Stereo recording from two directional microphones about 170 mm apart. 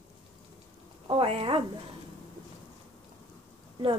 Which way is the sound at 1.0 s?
30° right (ahead or behind).